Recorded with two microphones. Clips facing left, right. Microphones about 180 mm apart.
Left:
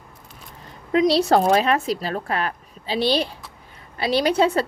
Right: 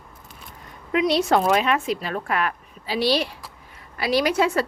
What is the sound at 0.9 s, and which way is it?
A woman's voice, 35° left (ahead or behind).